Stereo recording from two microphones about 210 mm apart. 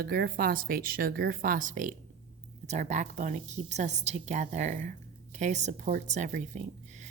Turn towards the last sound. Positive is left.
turn(degrees=-35)  # may be behind; listen again after turning